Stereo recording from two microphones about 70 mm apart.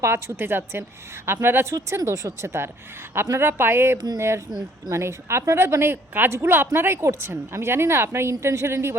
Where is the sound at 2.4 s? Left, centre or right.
Right.